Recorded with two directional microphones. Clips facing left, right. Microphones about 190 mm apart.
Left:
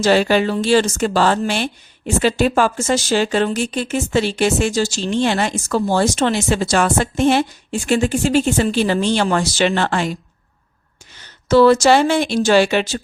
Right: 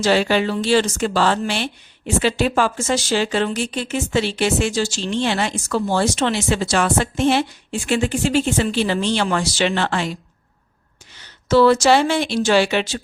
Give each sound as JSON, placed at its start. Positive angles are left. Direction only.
{"t": 0.0, "sound": "speech", "side_deg": 45}
{"t": 11.4, "sound": "speech", "side_deg": 45}